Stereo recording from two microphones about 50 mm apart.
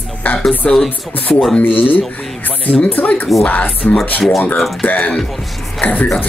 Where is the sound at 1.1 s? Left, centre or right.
Left.